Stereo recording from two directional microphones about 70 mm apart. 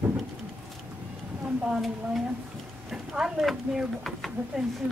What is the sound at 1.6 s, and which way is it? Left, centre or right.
Speech, centre.